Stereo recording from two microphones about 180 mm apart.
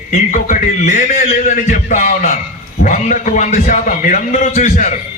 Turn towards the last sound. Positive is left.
turn(degrees=40)  # may be behind; listen again after turning